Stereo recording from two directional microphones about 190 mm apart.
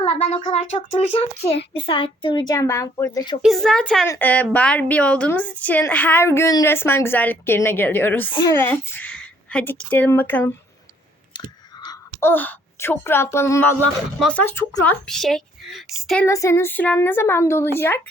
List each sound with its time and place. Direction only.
0.0 s speech: 35° left (ahead or behind)
3.4 s a woman's voice: centre (ahead or behind)
8.3 s a woman's voice: 20° left (ahead or behind)
11.9 s a woman's voice: 10° left (ahead or behind)
16.2 s a woman's voice: 15° left (ahead or behind)